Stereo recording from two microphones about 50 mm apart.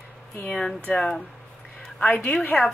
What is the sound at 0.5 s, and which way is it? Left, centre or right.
Speech, left.